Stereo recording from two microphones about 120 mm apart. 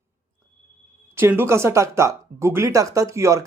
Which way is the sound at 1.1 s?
20° right (ahead or behind).